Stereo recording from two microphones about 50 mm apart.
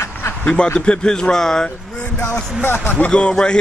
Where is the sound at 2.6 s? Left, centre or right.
Left.